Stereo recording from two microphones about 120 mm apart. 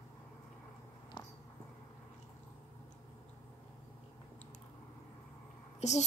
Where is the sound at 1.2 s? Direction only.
40° left (ahead or behind).